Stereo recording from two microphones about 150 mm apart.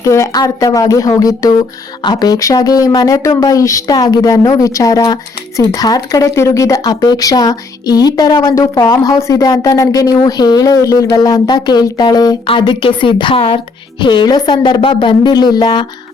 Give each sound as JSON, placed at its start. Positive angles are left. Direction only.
{"t": 0.0, "sound": "a woman's voice", "side_deg": 20}